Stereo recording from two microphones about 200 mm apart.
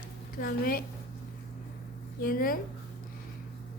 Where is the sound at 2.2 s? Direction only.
45° left (ahead or behind).